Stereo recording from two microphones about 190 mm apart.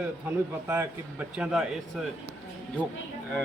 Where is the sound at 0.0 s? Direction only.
10° right (ahead or behind).